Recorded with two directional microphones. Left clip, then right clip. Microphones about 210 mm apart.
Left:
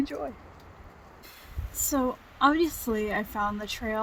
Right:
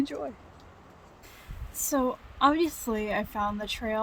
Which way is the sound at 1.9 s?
5° right (ahead or behind).